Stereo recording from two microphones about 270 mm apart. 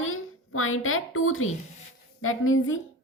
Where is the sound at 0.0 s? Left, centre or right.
Left.